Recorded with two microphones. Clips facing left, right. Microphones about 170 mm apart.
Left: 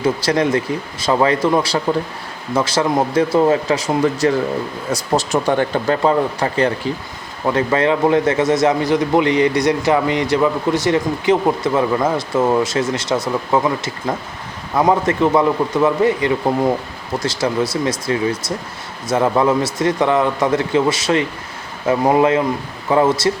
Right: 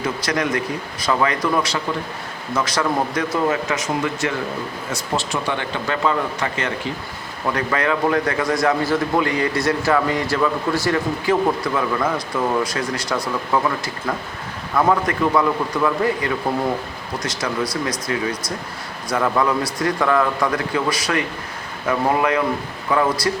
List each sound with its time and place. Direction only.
0.0 s a man's voice: 30° left (ahead or behind)